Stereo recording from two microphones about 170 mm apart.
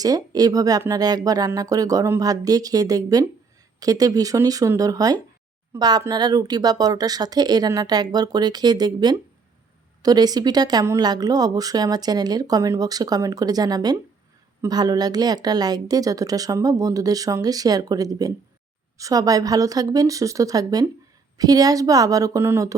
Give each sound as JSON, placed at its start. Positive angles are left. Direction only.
{"t": 0.0, "sound": "speech", "side_deg": -20}